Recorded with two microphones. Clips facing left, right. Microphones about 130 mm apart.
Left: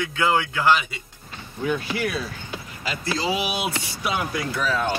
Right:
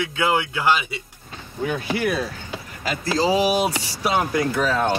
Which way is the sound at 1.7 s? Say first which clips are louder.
Right 2 dB; 50° right (ahead or behind).